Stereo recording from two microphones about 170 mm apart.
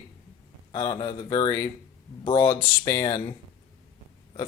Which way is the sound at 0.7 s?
25° left (ahead or behind).